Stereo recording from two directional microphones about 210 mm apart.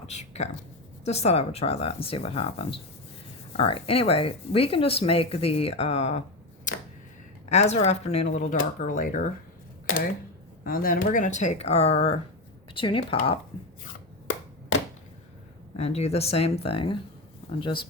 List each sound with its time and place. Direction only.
0.1 s speech: 35° left (ahead or behind)
7.5 s speech: 30° left (ahead or behind)
10.6 s speech: 45° left (ahead or behind); by 13.4 s 30° left (ahead or behind)
15.7 s speech: 30° left (ahead or behind)